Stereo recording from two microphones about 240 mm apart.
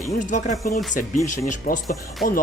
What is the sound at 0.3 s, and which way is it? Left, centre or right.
Speech, left.